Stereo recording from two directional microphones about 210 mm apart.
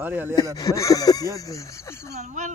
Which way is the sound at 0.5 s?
15° left (ahead or behind).